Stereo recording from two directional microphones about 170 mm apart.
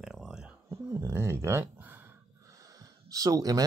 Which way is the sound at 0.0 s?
5° right (ahead or behind).